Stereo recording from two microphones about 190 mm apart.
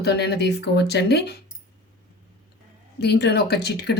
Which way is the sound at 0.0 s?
60° left (ahead or behind).